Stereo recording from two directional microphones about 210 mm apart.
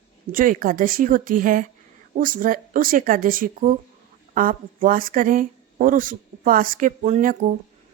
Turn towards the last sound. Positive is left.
turn(degrees=-40)  # may be behind; listen again after turning